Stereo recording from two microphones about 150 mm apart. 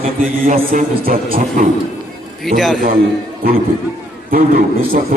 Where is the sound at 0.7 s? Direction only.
70° right (ahead or behind).